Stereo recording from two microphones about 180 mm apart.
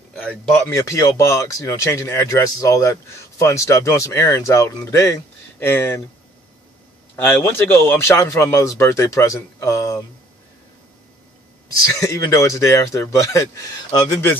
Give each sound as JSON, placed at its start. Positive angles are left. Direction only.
{"t": 0.7, "sound": "speech", "side_deg": 15}
{"t": 7.2, "sound": "speech", "side_deg": 10}
{"t": 12.0, "sound": "speech", "side_deg": 15}